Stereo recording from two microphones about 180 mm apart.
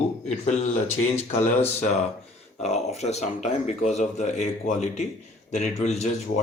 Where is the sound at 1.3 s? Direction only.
35° left (ahead or behind).